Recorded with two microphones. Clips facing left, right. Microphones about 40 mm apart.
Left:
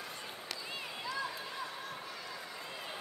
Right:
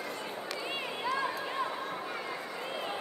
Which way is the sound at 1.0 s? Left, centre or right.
Right.